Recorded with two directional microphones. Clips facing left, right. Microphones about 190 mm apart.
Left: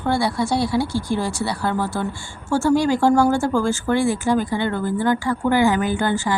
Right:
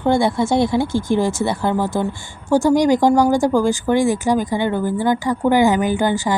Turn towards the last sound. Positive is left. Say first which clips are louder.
# right 3 dB
turn(degrees=-15)  # may be behind; listen again after turning